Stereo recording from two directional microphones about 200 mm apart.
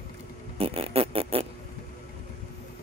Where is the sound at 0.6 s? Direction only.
30° right (ahead or behind).